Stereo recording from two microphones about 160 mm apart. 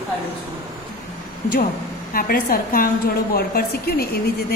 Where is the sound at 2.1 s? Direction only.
70° left (ahead or behind).